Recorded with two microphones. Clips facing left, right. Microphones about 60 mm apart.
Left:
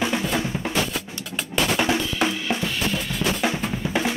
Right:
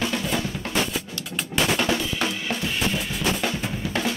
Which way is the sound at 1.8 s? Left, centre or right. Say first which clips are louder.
Left 2 dB; centre.